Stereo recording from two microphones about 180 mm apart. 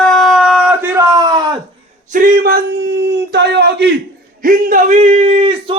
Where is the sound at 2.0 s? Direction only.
50° right (ahead or behind); by 3.9 s 70° right (ahead or behind).